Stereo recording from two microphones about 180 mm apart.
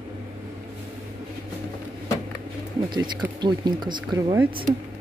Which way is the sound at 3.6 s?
25° right (ahead or behind).